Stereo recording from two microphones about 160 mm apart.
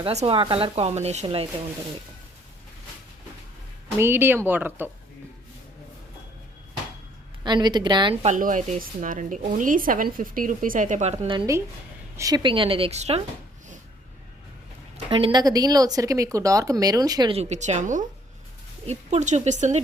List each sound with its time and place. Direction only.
0.0 s speech: 40° right (ahead or behind)
3.9 s speech: 15° right (ahead or behind)
7.4 s speech: 25° right (ahead or behind)
8.1 s speech: 40° right (ahead or behind)
8.4 s speech: 55° right (ahead or behind)
11.3 s speech: 20° right (ahead or behind); by 13.2 s 40° right (ahead or behind)
14.9 s speech: 35° right (ahead or behind)
17.3 s speech: 45° right (ahead or behind)